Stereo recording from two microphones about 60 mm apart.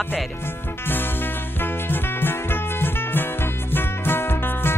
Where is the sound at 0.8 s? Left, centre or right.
Left.